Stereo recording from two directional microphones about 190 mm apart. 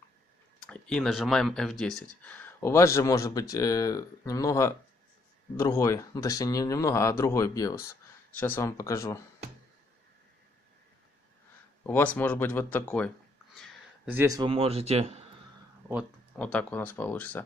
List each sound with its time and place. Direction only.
0.7 s speech: 5° left (ahead or behind)
11.8 s speech: 10° left (ahead or behind)
14.0 s speech: 15° right (ahead or behind)
14.5 s speech: 30° right (ahead or behind)
16.3 s speech: 5° left (ahead or behind)